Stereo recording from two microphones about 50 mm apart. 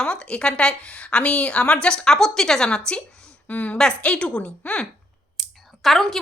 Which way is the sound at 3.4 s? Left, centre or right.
Left.